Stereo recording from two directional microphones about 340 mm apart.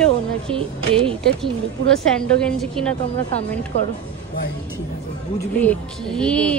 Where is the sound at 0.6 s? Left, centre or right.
Centre.